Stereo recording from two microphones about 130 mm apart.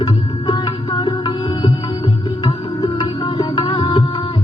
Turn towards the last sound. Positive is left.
turn(degrees=35)  # may be behind; listen again after turning